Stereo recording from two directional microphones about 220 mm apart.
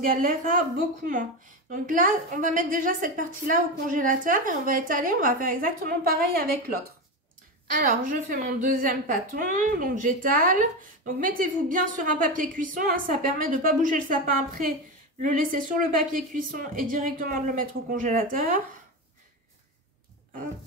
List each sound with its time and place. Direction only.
0.0 s a woman's voice: 40° right (ahead or behind)
7.7 s a woman's voice: 40° right (ahead or behind)